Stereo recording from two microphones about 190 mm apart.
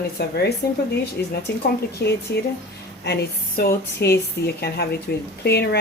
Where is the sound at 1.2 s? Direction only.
10° left (ahead or behind).